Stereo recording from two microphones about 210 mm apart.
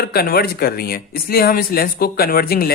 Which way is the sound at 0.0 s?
45° left (ahead or behind).